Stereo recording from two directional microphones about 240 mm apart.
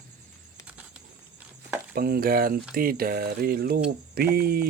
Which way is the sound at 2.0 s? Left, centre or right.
Right.